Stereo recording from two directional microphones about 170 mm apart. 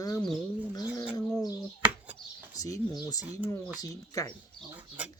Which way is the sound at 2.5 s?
20° left (ahead or behind).